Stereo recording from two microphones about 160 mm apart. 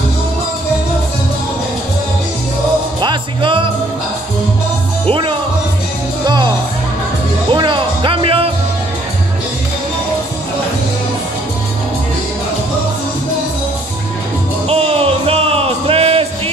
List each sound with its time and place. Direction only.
3.0 s music: 30° right (ahead or behind)
6.2 s music: 30° right (ahead or behind)
7.5 s music: 30° right (ahead or behind)
14.7 s music: 40° right (ahead or behind)